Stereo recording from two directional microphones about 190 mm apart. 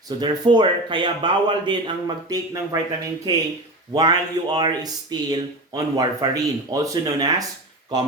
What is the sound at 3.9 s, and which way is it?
Speech, 20° right (ahead or behind).